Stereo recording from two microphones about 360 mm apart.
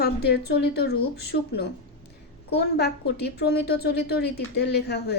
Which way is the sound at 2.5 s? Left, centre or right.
Left.